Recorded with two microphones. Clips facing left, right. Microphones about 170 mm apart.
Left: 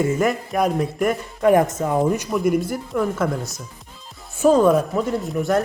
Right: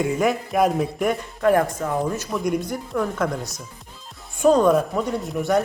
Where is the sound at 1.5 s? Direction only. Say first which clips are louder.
Left 3 dB; 20° left (ahead or behind).